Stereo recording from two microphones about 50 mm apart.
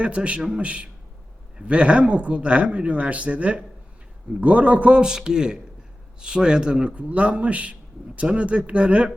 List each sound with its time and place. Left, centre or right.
0.0 s a man's voice: right